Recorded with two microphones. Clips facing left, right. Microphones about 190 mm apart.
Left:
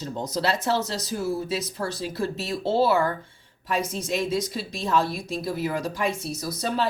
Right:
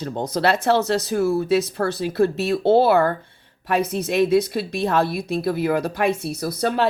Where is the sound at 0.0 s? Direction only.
60° right (ahead or behind).